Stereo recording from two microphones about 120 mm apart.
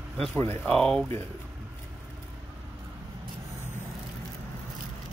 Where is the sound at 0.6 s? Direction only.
5° left (ahead or behind).